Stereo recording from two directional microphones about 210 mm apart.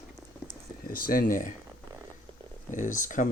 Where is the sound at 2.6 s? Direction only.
35° left (ahead or behind).